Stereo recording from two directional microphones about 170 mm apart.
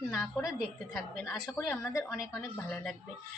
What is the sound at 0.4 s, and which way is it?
Speech, centre (ahead or behind).